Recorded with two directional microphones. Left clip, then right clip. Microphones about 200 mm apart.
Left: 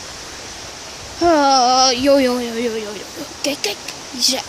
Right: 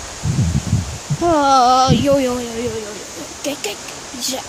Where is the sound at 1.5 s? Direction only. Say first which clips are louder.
Right 2 dB; 5° right (ahead or behind).